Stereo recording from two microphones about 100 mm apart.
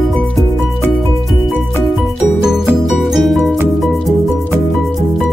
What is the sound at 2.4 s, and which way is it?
Music, 5° right (ahead or behind).